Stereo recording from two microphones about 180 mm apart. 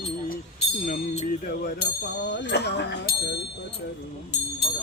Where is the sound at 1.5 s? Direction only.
55° left (ahead or behind).